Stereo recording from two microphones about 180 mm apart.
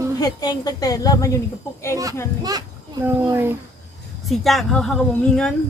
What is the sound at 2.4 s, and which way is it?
A child's voice, 20° right (ahead or behind).